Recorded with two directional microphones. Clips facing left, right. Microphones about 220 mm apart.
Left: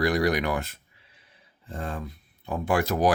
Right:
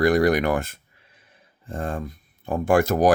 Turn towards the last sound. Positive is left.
turn(degrees=-45)  # may be behind; listen again after turning